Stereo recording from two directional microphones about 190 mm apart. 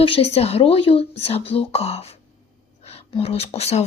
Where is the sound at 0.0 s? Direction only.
30° left (ahead or behind).